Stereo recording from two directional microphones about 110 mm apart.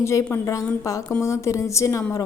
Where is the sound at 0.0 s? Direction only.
25° left (ahead or behind).